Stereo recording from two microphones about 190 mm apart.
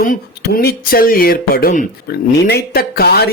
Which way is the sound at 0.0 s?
45° left (ahead or behind).